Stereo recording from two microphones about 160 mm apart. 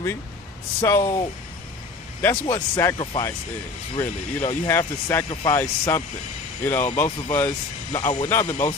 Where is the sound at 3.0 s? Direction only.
30° left (ahead or behind).